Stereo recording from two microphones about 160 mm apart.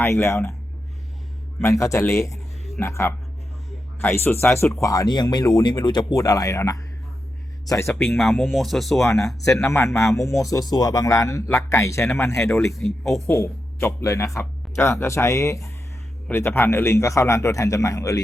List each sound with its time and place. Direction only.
0.0 s speech: 15° left (ahead or behind)
1.6 s speech: 20° left (ahead or behind)
8.2 s speech: centre (ahead or behind)
9.4 s speech: 15° left (ahead or behind)
12.8 s speech: centre (ahead or behind)
13.2 s speech: 15° left (ahead or behind)